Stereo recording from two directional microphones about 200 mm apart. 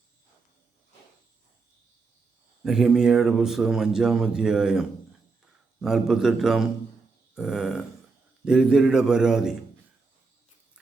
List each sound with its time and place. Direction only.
2.6 s speech: centre (ahead or behind)